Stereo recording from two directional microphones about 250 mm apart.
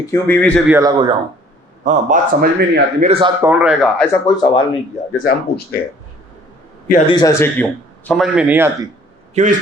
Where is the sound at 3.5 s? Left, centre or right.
Centre.